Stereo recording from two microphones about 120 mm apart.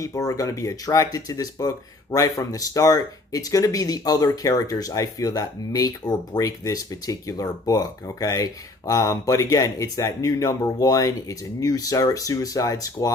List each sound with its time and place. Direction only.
0.0 s speech: 30° left (ahead or behind)